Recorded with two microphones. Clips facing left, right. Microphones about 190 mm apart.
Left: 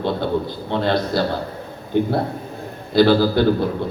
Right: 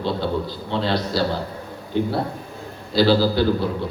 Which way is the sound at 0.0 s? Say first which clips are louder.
Left 2 dB; 55° left (ahead or behind).